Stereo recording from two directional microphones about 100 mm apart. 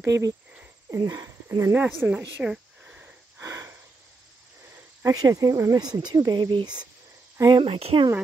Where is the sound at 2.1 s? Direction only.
10° right (ahead or behind).